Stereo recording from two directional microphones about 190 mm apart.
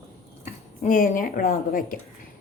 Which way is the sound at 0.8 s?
45° left (ahead or behind).